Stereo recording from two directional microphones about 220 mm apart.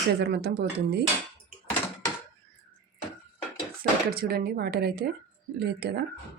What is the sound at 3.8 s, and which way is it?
Speech, 45° right (ahead or behind).